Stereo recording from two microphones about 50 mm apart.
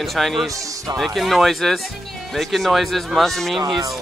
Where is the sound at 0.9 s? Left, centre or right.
Centre.